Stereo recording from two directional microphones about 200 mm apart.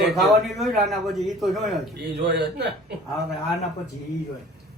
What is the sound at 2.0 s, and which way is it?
Speech, 55° right (ahead or behind).